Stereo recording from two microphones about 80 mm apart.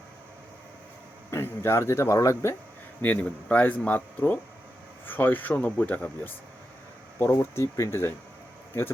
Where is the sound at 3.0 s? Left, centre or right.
Centre.